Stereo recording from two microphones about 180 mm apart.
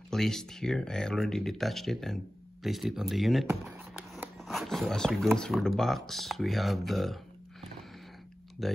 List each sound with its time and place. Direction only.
0.1 s speech: centre (ahead or behind)
8.6 s speech: centre (ahead or behind)